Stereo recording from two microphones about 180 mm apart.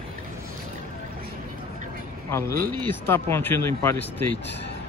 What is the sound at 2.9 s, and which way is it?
Speech, 15° left (ahead or behind).